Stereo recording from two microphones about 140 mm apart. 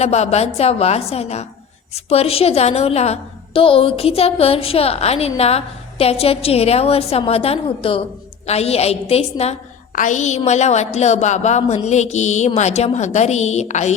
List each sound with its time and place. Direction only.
0.0 s a woman's voice: 50° left (ahead or behind)
9.9 s a woman's voice: 65° left (ahead or behind)